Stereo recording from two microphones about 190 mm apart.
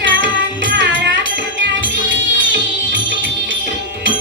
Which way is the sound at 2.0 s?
75° right (ahead or behind).